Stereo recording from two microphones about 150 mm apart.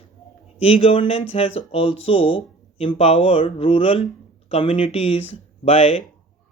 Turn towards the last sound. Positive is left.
turn(degrees=40)  # may be behind; listen again after turning